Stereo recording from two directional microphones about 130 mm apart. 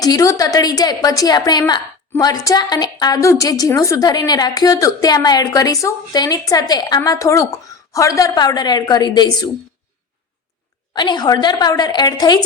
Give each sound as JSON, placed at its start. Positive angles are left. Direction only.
{"t": 0.0, "sound": "a woman's voice", "side_deg": 25}
{"t": 10.9, "sound": "a woman's voice", "side_deg": 35}